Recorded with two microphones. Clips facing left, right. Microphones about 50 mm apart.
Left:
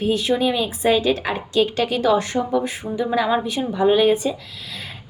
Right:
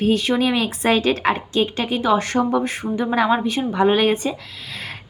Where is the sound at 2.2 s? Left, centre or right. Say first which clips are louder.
Right 2 dB; right.